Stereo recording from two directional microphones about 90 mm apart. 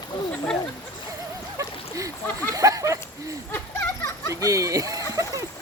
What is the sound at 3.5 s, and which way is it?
Children playing, 25° left (ahead or behind).